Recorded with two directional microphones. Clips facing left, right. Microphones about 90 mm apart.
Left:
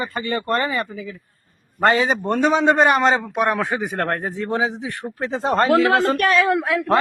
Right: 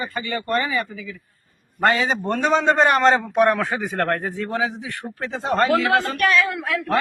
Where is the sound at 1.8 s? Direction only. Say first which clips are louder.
Left 2 dB; 25° left (ahead or behind).